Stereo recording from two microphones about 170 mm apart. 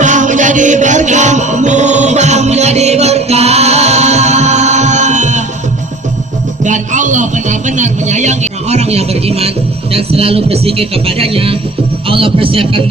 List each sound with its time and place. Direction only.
0.0 s music: 45° right (ahead or behind)
6.7 s a sound: 45° right (ahead or behind)
9.9 s a man's voice: 35° right (ahead or behind)